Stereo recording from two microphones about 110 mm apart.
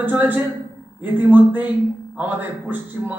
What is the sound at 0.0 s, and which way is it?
Speech, 15° right (ahead or behind).